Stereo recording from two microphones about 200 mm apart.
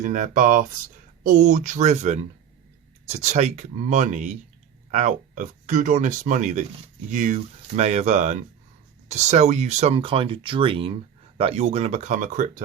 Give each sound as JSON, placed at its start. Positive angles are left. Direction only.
{"t": 0.0, "sound": "speech", "side_deg": -40}